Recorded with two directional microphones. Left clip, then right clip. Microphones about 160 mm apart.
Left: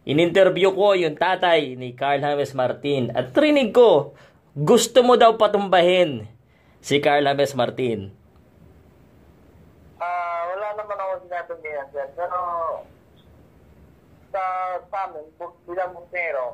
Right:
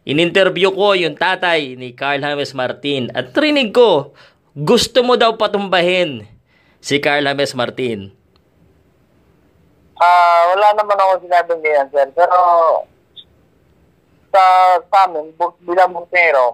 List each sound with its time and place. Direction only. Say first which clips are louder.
0.0 s speech: right 3 dB; 25° right (ahead or behind)
9.9 s speech: right 16 dB; 65° right (ahead or behind)
14.3 s speech: right 16 dB; 65° right (ahead or behind)